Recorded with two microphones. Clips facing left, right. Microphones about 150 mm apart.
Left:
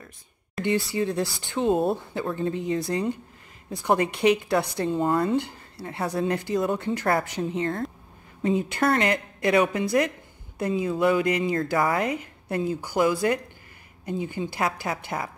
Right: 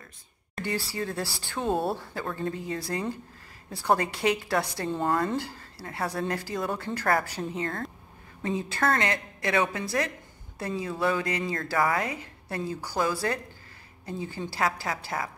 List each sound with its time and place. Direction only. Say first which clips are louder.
0.9 s a woman's voice: left 6 dB; 20° left (ahead or behind)